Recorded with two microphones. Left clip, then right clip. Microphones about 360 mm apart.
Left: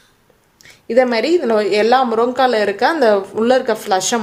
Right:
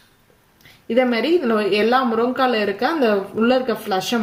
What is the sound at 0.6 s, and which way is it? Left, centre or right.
A woman's voice, centre.